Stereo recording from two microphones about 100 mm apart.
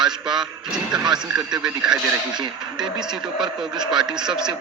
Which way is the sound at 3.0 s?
50° right (ahead or behind).